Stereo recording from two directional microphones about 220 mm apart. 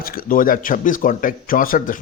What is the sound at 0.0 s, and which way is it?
Speech, 40° left (ahead or behind).